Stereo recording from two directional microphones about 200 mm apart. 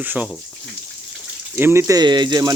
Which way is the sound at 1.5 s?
10° right (ahead or behind).